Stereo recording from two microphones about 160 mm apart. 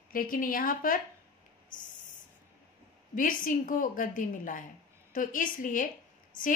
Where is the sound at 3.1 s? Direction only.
60° left (ahead or behind).